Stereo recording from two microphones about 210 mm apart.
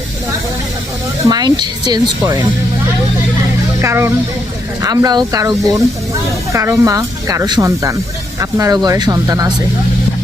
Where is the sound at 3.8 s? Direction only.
15° right (ahead or behind).